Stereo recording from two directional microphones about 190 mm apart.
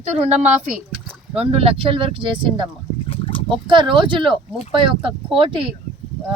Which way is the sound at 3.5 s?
25° right (ahead or behind).